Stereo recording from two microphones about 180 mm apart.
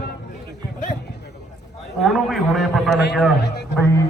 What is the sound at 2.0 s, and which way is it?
Speech, centre (ahead or behind).